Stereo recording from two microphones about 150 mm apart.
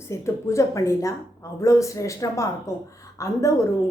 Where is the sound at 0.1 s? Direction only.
20° left (ahead or behind).